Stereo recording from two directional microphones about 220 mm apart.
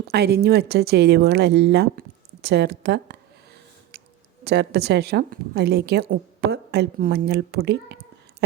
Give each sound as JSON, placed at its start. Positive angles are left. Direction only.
{"t": 0.1, "sound": "a woman's voice", "side_deg": -45}
{"t": 4.4, "sound": "a woman's voice", "side_deg": -50}